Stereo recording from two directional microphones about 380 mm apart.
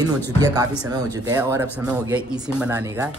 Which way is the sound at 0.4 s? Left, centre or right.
Centre.